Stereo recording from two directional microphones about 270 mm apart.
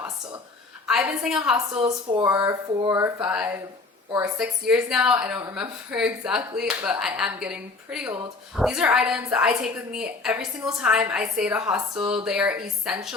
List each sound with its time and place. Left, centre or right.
0.9 s a woman's voice: centre
1.8 s speech: centre
2.2 s a woman's voice: centre